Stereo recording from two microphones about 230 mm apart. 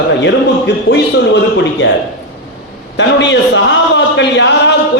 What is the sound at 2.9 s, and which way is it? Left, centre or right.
A man's voice, left.